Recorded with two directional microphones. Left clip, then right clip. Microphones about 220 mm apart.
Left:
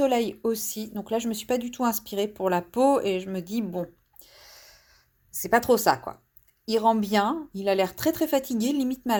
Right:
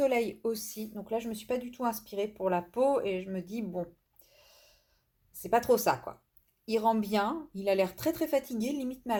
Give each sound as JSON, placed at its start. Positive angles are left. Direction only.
{"t": 0.0, "sound": "speech", "side_deg": 25}
{"t": 4.3, "sound": "a sound", "side_deg": 40}
{"t": 5.4, "sound": "speech", "side_deg": 30}